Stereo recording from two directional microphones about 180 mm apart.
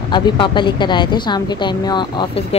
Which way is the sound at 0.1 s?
25° left (ahead or behind).